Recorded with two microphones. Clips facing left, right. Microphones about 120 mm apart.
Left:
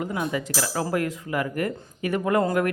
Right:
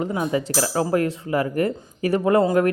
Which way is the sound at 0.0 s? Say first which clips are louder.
Right 4 dB; 30° right (ahead or behind).